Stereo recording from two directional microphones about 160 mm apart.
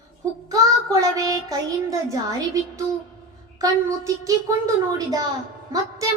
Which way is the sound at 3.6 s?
20° right (ahead or behind).